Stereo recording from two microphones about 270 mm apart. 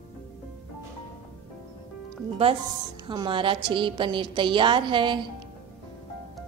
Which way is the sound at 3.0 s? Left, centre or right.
Centre.